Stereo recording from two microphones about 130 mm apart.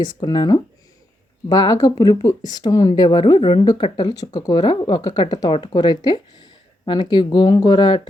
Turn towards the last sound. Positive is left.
turn(degrees=35)  # may be behind; listen again after turning